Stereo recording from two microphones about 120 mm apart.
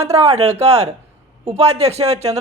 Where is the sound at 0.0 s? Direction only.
60° right (ahead or behind).